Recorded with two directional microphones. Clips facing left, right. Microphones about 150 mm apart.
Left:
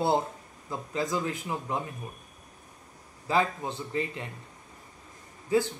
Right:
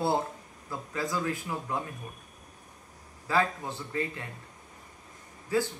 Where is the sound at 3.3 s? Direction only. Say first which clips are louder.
Left 1 dB; 20° left (ahead or behind).